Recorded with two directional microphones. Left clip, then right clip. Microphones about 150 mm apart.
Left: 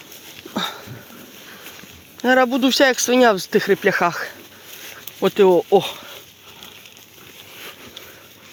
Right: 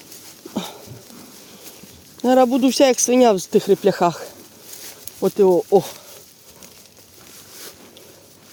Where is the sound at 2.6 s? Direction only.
35° right (ahead or behind).